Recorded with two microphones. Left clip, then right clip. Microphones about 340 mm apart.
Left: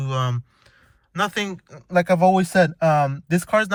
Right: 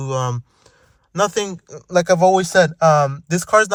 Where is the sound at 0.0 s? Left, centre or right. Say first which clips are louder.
Right 4 dB; centre.